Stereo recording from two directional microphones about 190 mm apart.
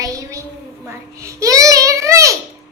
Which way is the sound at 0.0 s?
15° right (ahead or behind).